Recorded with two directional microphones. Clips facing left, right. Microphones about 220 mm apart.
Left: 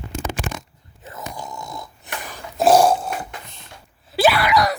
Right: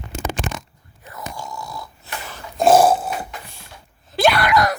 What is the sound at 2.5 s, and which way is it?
Dog, centre (ahead or behind).